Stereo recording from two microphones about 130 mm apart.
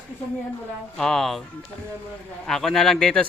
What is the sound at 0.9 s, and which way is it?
Speech, 5° left (ahead or behind).